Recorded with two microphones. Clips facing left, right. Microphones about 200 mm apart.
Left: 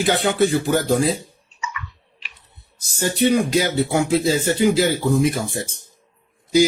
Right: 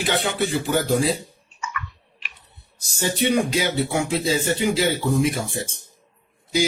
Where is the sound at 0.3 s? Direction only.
45° left (ahead or behind).